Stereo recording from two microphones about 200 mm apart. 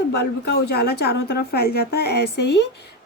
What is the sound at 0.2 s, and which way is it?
A woman's voice, 55° left (ahead or behind).